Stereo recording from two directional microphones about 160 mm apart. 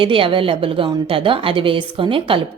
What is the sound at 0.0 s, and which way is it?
A woman's voice, 35° right (ahead or behind).